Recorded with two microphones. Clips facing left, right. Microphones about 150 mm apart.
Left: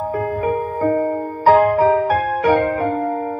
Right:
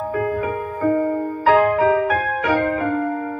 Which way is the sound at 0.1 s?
35° left (ahead or behind).